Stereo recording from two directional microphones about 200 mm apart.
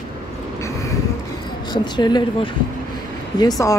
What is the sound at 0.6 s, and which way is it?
Vehicle, 15° left (ahead or behind).